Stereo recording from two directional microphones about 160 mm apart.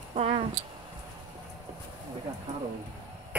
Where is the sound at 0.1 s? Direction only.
40° right (ahead or behind).